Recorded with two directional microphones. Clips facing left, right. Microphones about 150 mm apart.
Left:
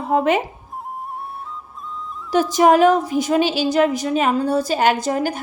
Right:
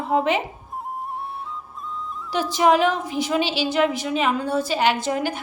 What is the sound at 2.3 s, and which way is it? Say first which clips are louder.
A woman's voice: left 4 dB; 45° left (ahead or behind).